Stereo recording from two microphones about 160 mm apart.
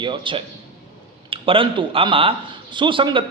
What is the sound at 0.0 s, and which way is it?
A man's voice, 30° right (ahead or behind).